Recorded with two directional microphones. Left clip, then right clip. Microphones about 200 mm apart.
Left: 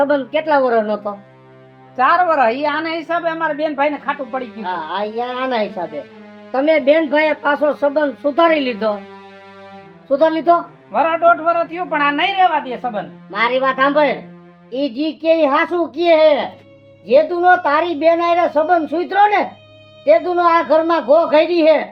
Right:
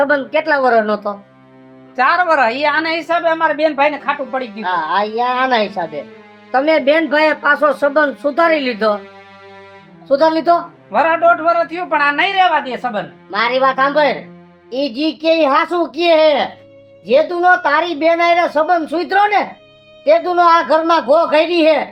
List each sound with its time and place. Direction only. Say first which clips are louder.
0.0 s speech: right 2 dB; 15° right (ahead or behind)
2.0 s a woman's voice: right 1 dB; 30° right (ahead or behind); by 8.9 s 15° right (ahead or behind)
10.1 s speech: right 1 dB; 15° right (ahead or behind)
10.9 s a man's voice: right 1 dB; 30° right (ahead or behind)
13.3 s a woman's voice: right 2 dB; 15° right (ahead or behind)